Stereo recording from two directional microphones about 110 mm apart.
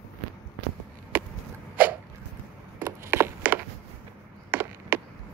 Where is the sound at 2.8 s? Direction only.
25° right (ahead or behind).